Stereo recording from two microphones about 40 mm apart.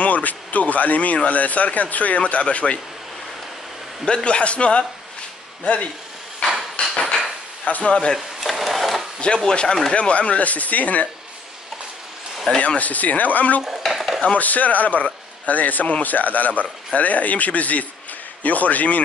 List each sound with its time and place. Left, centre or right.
0.0 s speech: left
4.0 s a man's voice: left
6.4 s a sound: left
7.6 s speech: left
8.4 s a sound: centre
9.5 s a man's voice: centre
9.9 s speech: left
12.5 s speech: left
13.8 s dishes: centre
14.3 s speech: left